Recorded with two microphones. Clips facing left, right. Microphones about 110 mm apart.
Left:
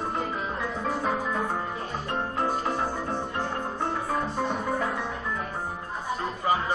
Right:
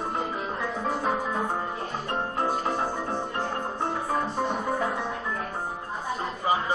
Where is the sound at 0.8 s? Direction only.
30° right (ahead or behind).